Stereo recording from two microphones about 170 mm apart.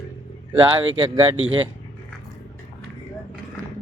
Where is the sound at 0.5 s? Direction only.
30° right (ahead or behind).